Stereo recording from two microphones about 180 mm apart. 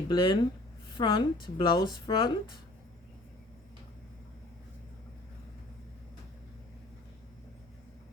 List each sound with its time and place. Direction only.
0.1 s a woman's voice: 25° left (ahead or behind)